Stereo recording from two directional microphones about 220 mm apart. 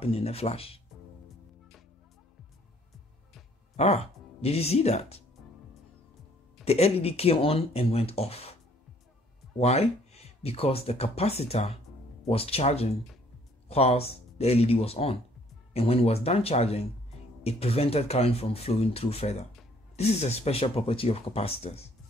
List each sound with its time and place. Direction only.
0.0 s speech: 25° left (ahead or behind)
3.7 s speech: 30° left (ahead or behind)
6.6 s speech: 30° left (ahead or behind)
9.6 s speech: 30° left (ahead or behind)